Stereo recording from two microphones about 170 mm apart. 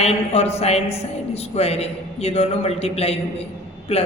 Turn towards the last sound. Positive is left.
turn(degrees=35)  # may be behind; listen again after turning